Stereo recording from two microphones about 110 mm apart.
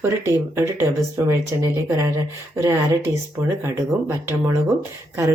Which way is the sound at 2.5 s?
25° right (ahead or behind).